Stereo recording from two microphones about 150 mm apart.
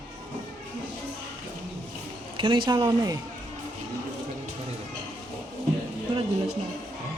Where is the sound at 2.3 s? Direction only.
30° right (ahead or behind).